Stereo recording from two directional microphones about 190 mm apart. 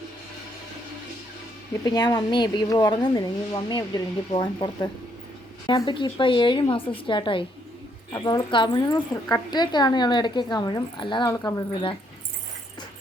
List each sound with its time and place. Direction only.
1.8 s a woman's voice: 20° left (ahead or behind)